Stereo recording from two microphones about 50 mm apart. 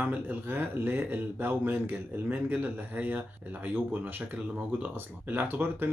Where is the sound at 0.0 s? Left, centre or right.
Right.